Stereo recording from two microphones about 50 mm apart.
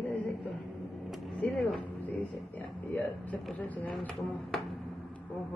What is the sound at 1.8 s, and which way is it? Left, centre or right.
Speech, left.